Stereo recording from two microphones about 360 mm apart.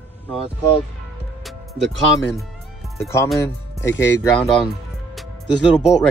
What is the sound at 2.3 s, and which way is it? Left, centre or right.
Speech, centre.